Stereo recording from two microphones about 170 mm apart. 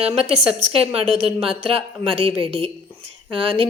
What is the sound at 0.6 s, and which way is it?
A woman's voice, 35° right (ahead or behind).